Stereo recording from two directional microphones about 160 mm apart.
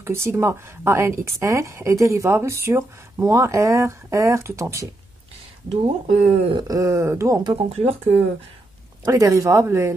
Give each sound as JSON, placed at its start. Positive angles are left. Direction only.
{"t": 0.0, "sound": "speech", "side_deg": -15}
{"t": 5.7, "sound": "speech", "side_deg": -45}
{"t": 6.5, "sound": "speech", "side_deg": -20}
{"t": 7.7, "sound": "speech", "side_deg": -40}
{"t": 9.0, "sound": "speech", "side_deg": -20}